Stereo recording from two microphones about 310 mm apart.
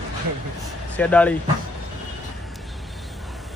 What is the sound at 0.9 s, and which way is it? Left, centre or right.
Speech, centre.